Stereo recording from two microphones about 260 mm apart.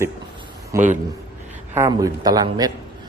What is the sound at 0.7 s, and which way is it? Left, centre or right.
A man's voice, centre.